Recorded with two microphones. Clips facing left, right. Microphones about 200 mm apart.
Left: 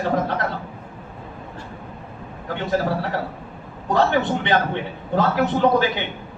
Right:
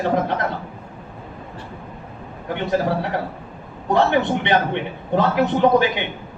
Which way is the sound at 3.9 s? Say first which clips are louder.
Right 2 dB; 20° right (ahead or behind).